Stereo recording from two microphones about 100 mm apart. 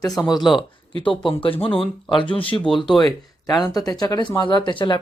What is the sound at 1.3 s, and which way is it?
Speech, 70° left (ahead or behind).